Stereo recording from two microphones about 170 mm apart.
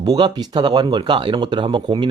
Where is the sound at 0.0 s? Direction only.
25° right (ahead or behind).